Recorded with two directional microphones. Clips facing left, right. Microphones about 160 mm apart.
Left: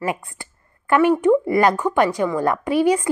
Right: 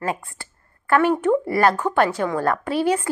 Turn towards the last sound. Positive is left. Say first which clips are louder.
# left 3 dB
turn(degrees=10)  # may be behind; listen again after turning